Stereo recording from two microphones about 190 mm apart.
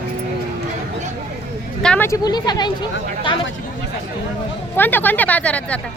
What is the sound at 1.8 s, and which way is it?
Speech, 5° left (ahead or behind).